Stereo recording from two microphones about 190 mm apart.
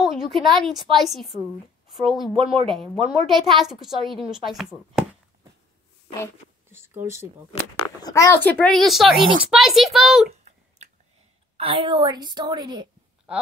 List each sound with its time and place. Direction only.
0.0 s a woman's voice: centre (ahead or behind)
2.3 s a woman's voice: 30° right (ahead or behind)
2.7 s a woman's voice: centre (ahead or behind)
6.7 s speech: 10° right (ahead or behind)
8.0 s a woman's voice: 15° left (ahead or behind); by 10.3 s centre (ahead or behind)
11.5 s a woman's voice: 30° right (ahead or behind)